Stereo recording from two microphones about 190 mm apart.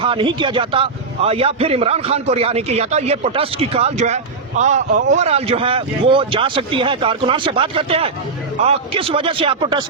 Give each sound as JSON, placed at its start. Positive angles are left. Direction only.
{"t": 0.0, "sound": "a man's voice", "side_deg": -25}